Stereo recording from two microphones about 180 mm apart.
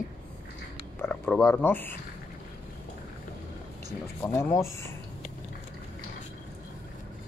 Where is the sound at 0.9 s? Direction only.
10° left (ahead or behind).